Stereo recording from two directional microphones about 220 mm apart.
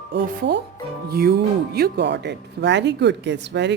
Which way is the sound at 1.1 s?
45° right (ahead or behind).